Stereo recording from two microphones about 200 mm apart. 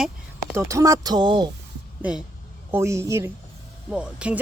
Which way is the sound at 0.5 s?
15° right (ahead or behind).